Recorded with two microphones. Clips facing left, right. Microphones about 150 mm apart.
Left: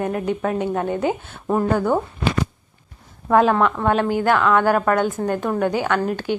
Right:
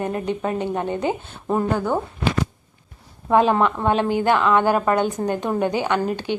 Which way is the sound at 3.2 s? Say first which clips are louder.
Left 1 dB; 15° right (ahead or behind).